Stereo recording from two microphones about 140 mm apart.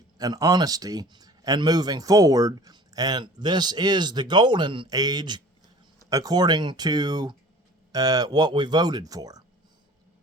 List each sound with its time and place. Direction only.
0.2 s speech: 25° right (ahead or behind)